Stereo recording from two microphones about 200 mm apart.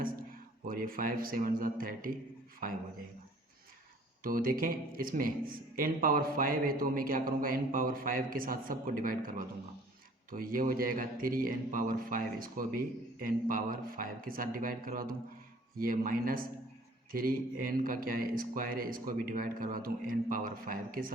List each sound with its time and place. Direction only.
0.6 s a man's voice: 45° right (ahead or behind)
4.2 s a man's voice: 45° right (ahead or behind)
10.3 s a man's voice: 45° right (ahead or behind)